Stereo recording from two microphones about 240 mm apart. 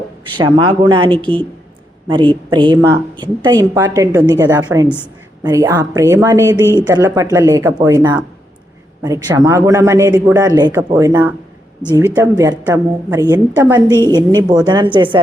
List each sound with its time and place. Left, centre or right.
0.3 s a woman's voice: centre